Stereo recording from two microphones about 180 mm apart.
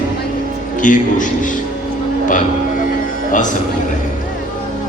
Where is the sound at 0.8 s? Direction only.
45° left (ahead or behind).